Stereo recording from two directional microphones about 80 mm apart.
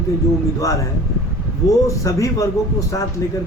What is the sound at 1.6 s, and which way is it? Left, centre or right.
A man's voice, left.